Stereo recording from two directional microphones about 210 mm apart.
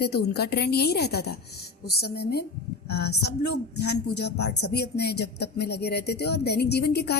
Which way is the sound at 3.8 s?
50° left (ahead or behind).